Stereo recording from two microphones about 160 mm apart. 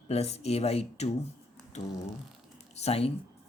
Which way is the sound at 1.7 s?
45° left (ahead or behind).